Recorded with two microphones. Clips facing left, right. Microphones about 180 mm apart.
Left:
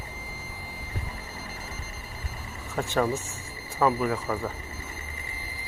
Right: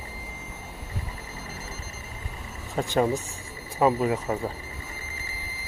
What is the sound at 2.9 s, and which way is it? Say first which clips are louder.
Speech: right 2 dB; 15° right (ahead or behind).